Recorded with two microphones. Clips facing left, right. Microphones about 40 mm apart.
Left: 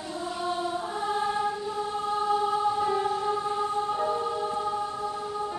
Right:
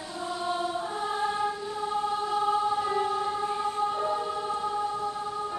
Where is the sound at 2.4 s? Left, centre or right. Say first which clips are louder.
Even; centre.